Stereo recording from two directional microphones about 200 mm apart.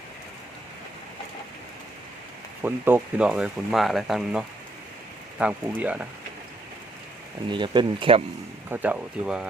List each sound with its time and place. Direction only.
2.6 s speech: 10° right (ahead or behind)
7.4 s speech: 25° right (ahead or behind)
8.7 s speech: 5° right (ahead or behind)